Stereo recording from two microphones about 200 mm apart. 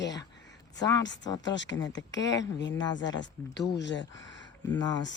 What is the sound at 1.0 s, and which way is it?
Speech, 65° left (ahead or behind).